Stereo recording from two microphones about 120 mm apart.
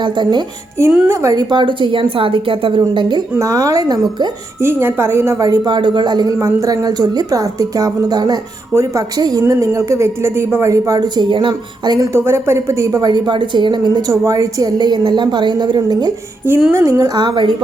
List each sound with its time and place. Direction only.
0.0 s a woman's voice: 40° right (ahead or behind)
1.0 s a woman's voice: 25° right (ahead or behind); by 3.2 s 40° right (ahead or behind)
3.3 s a woman's voice: 25° right (ahead or behind)
4.6 s a woman's voice: 20° right (ahead or behind); by 12.0 s 40° right (ahead or behind)
12.1 s a woman's voice: 20° right (ahead or behind)
16.7 s a woman's voice: 25° right (ahead or behind)
17.2 s a woman's voice: 40° right (ahead or behind)